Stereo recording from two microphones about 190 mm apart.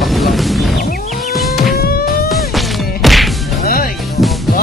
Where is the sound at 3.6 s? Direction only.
50° left (ahead or behind).